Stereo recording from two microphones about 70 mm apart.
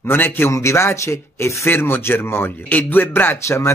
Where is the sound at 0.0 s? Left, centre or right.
Left.